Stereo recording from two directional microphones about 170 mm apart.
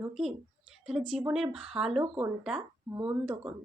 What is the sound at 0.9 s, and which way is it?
Speech, 5° right (ahead or behind).